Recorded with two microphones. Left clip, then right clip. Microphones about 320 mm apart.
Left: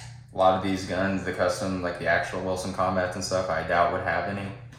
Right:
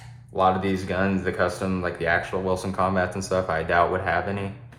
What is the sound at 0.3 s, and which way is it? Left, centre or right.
Speech, right.